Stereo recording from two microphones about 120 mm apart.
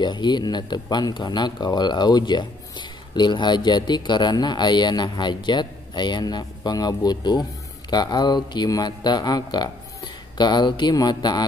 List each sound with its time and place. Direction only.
0.0 s speech: 40° left (ahead or behind)